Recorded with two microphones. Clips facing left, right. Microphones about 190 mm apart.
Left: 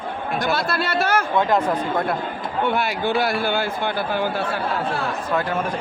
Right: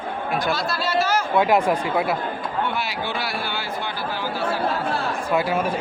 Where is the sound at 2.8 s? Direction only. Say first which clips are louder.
Left 6 dB; 50° left (ahead or behind).